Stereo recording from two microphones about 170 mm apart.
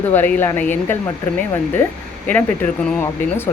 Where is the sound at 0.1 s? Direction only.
10° left (ahead or behind).